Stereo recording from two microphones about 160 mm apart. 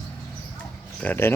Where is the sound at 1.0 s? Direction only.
10° left (ahead or behind).